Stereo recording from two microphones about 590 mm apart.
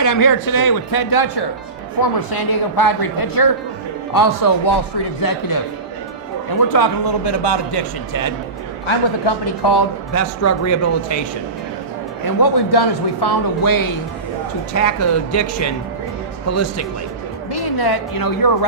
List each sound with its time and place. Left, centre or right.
0.0 s a man's voice: left
6.7 s a man's voice: left
12.2 s a man's voice: left
17.5 s a woman's voice: left